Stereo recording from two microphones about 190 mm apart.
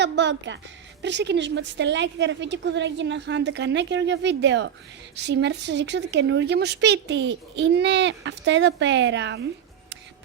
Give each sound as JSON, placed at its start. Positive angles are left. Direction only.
{"t": 0.0, "sound": "a woman's voice", "side_deg": -65}